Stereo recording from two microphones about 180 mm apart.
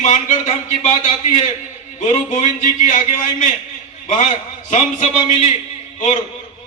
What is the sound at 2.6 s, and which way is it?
Speech, 45° left (ahead or behind).